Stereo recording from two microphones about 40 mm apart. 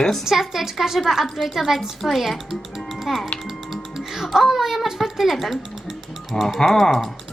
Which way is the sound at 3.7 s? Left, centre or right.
Centre.